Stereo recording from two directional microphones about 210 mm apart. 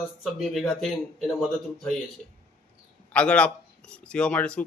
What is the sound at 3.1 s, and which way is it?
A man's voice, 5° left (ahead or behind).